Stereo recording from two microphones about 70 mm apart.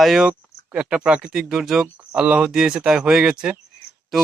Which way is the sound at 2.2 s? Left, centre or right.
Centre.